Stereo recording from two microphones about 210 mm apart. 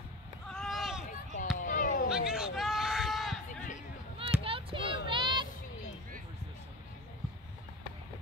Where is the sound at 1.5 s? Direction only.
40° left (ahead or behind).